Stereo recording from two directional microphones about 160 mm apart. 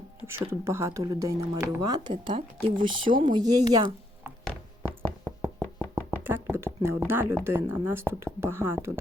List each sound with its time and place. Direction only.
0.3 s speech: 15° right (ahead or behind)
2.0 s speech: 30° right (ahead or behind)
4.8 s knock: 20° right (ahead or behind)
6.2 s speech: 15° right (ahead or behind)